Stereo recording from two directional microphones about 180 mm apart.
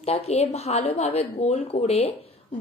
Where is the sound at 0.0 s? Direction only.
35° left (ahead or behind).